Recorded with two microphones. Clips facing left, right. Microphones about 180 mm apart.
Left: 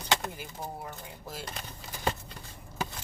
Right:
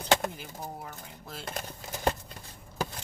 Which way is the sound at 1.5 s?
45° right (ahead or behind).